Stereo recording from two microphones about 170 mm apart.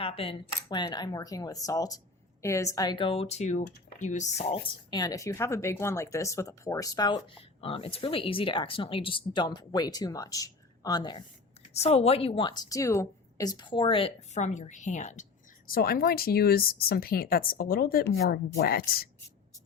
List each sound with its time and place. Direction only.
0.0 s a woman's voice: 35° left (ahead or behind)
4.6 s speech: 25° left (ahead or behind)
7.6 s speech: 35° left (ahead or behind)
11.7 s a woman's voice: 40° left (ahead or behind); by 19.0 s 65° left (ahead or behind)